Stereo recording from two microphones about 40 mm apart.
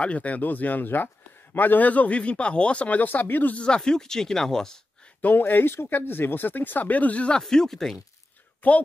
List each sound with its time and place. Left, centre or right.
0.0 s a man's voice: left
3.5 s speech: left
5.4 s speech: left
7.4 s speech: centre
8.6 s speech: left